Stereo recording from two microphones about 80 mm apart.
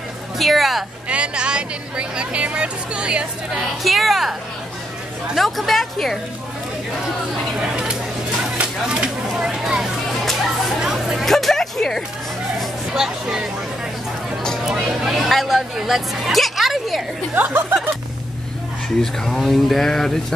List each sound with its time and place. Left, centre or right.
0.4 s speech: centre
1.0 s speech: centre
3.8 s speech: centre
7.7 s a sound: centre
12.5 s hubbub: centre
14.6 s speech: centre
17.3 s speech: right
19.2 s speech: centre